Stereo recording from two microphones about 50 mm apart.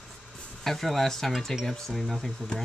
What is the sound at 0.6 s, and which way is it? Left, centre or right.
Speech, centre.